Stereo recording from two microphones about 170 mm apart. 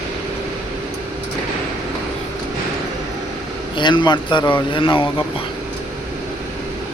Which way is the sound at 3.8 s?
25° left (ahead or behind).